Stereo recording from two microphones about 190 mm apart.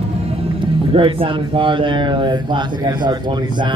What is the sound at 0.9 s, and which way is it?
Speech, 25° right (ahead or behind).